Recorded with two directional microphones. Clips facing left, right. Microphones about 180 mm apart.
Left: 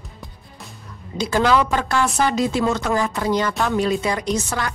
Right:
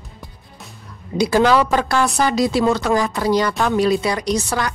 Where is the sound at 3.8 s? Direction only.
10° right (ahead or behind).